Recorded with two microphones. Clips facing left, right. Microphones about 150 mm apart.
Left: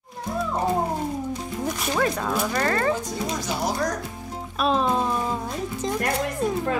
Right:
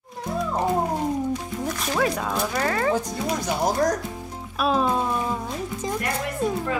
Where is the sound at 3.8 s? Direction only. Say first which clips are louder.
Right 4 dB; 45° right (ahead or behind).